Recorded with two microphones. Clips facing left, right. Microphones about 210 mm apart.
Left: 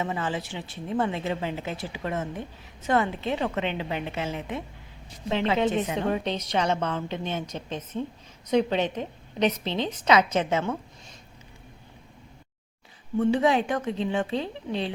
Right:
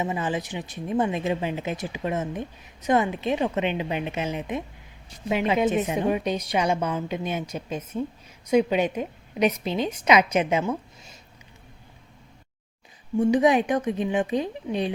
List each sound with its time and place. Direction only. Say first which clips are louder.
0.0 s speech: right 2 dB; 15° right (ahead or behind)
13.1 s speech: right 3 dB; 15° right (ahead or behind)